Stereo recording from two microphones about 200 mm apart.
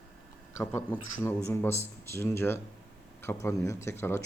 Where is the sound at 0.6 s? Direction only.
10° left (ahead or behind).